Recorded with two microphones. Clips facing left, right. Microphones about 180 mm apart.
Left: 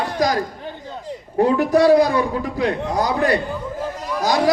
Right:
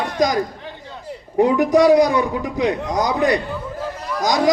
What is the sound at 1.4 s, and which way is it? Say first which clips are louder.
A man's voice: right 1 dB; 15° right (ahead or behind).